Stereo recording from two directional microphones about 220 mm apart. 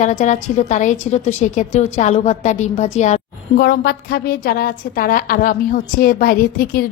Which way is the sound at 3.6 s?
45° left (ahead or behind).